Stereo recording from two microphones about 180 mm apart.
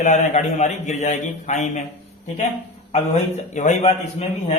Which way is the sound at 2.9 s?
40° left (ahead or behind).